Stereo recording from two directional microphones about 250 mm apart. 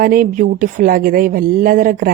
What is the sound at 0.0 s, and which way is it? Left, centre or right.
A woman's voice, right.